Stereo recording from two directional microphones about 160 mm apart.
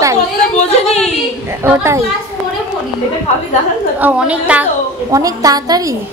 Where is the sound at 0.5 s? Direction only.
40° left (ahead or behind).